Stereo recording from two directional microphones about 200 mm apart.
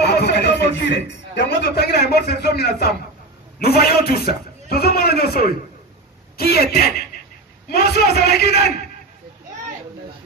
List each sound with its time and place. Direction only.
0.0 s a man's voice: 55° left (ahead or behind)